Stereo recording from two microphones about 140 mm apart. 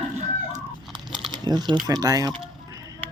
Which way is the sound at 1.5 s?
30° right (ahead or behind).